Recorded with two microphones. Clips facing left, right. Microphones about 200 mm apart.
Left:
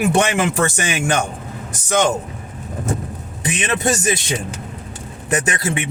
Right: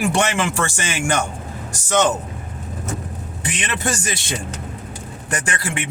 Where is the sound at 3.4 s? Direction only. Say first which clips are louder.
Left 5 dB; 20° left (ahead or behind).